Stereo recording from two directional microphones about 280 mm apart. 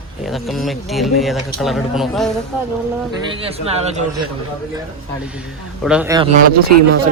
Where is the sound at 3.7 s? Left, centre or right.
Right.